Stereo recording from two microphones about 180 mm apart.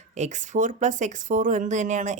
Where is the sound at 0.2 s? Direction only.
45° right (ahead or behind).